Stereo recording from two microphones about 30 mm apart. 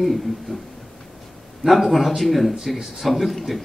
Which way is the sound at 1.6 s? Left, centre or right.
Centre.